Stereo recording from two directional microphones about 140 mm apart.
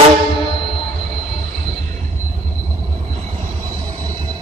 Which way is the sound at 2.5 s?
45° right (ahead or behind).